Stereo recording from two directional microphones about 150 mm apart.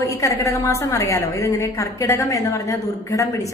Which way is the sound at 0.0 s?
20° left (ahead or behind).